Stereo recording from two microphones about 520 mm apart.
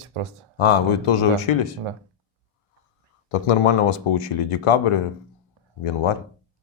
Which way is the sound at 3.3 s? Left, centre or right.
Left.